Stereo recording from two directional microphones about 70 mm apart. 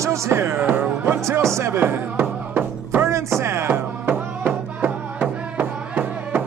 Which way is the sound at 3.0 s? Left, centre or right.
Right.